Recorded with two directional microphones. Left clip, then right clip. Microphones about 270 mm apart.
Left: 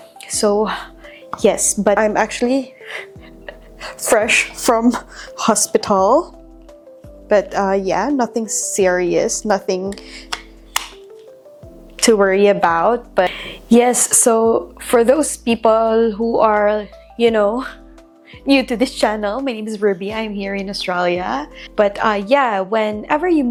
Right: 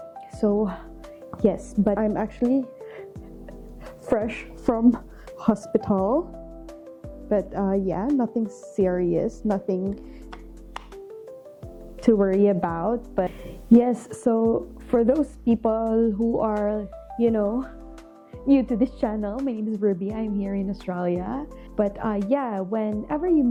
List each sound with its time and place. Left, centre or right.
0.3 s a woman's voice: centre
6.0 s speech: left
7.3 s a woman's voice: centre
8.0 s speech: left
8.3 s a woman's voice: centre
9.9 s filing: centre
11.9 s a woman's voice: centre